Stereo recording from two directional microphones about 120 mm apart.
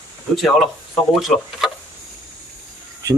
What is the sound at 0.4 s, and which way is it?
Speech, centre (ahead or behind).